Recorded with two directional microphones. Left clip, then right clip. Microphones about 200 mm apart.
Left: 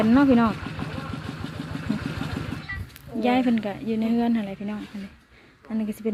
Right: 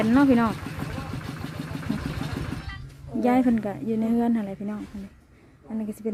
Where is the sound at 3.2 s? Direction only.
25° right (ahead or behind).